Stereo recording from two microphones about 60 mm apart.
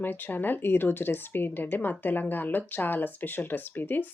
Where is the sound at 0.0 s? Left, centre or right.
Left.